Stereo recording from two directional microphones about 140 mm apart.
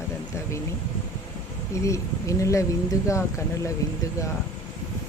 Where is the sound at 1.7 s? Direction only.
20° left (ahead or behind).